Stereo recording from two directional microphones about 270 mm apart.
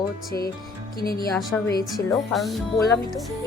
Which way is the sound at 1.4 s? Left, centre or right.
Centre.